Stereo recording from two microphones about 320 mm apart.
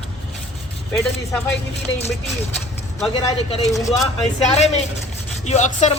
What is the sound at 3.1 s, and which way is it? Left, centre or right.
Speech, centre.